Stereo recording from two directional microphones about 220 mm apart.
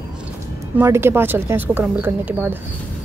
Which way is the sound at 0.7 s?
10° right (ahead or behind).